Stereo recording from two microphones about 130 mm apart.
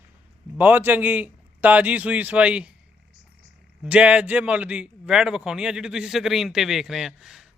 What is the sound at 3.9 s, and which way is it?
A man's voice, 10° right (ahead or behind).